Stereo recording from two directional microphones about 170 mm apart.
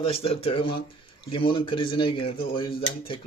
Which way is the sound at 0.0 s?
35° left (ahead or behind).